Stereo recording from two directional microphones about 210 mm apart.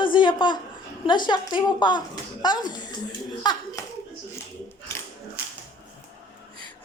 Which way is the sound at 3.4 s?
20° left (ahead or behind).